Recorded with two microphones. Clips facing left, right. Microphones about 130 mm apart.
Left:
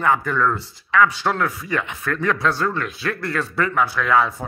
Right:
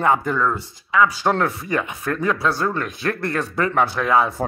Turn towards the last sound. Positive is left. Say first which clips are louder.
# right 1 dB
turn(degrees=-25)  # may be behind; listen again after turning